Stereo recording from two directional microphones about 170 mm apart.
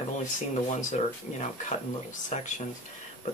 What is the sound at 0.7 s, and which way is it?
Speech, 45° left (ahead or behind).